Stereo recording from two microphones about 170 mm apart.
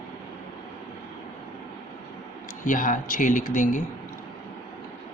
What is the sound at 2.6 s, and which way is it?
Speech, 50° left (ahead or behind).